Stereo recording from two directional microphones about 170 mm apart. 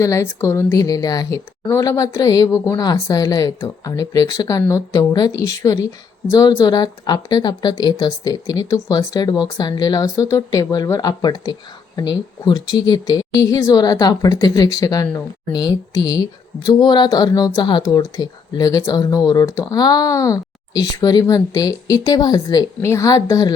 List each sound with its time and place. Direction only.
0.0 s speech: 20° left (ahead or behind)